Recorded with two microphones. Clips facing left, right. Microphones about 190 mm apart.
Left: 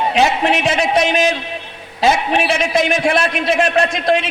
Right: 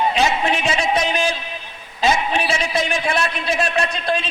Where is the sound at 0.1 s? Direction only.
75° left (ahead or behind).